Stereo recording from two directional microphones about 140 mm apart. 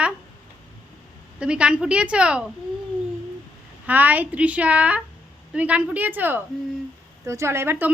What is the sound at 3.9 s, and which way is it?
Speech, 10° right (ahead or behind).